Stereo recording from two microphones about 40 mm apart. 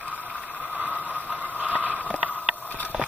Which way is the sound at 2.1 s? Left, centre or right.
Right.